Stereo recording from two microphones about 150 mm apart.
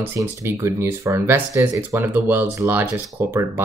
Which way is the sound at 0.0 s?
15° right (ahead or behind).